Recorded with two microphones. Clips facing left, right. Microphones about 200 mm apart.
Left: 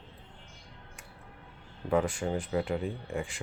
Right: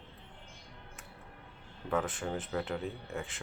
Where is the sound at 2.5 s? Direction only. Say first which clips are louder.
Left 5 dB; 10° left (ahead or behind).